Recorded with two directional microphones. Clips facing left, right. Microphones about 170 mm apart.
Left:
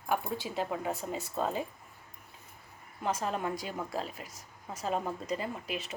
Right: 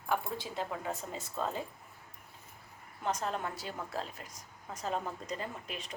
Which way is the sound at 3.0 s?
10° left (ahead or behind).